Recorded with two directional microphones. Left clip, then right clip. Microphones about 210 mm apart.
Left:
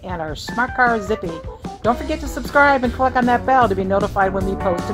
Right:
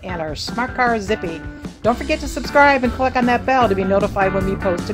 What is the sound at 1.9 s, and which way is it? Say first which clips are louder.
Speech: right 1 dB; 10° right (ahead or behind).